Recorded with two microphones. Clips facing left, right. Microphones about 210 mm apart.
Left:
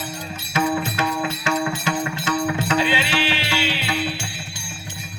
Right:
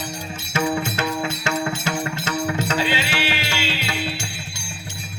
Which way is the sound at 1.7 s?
45° right (ahead or behind).